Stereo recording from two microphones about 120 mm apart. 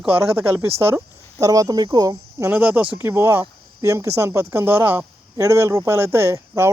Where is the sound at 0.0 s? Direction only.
20° right (ahead or behind).